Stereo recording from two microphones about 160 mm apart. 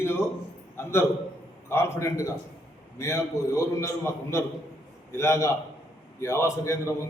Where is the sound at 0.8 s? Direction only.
15° left (ahead or behind).